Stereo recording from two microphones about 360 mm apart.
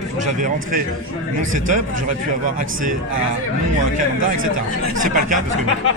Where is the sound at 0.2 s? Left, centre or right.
Right.